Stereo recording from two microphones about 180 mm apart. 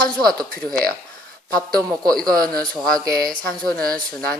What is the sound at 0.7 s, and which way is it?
Speech, 5° left (ahead or behind).